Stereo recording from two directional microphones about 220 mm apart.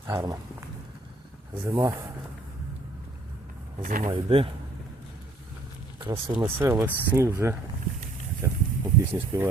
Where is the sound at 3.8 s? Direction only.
40° right (ahead or behind).